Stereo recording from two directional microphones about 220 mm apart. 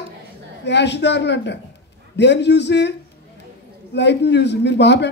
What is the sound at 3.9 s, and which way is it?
Speech, 50° left (ahead or behind).